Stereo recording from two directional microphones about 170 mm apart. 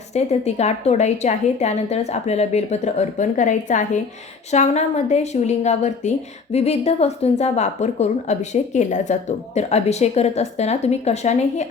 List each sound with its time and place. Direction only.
0.1 s a woman's voice: 40° left (ahead or behind)